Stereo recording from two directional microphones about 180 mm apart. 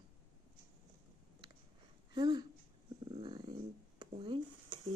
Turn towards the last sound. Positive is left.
turn(degrees=-30)  # may be behind; listen again after turning